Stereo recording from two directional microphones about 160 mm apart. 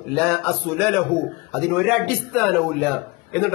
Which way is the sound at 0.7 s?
10° left (ahead or behind).